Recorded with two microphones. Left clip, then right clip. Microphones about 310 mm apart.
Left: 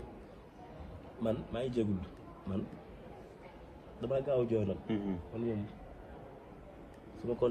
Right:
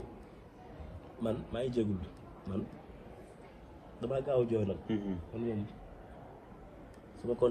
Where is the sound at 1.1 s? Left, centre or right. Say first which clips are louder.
Even; centre.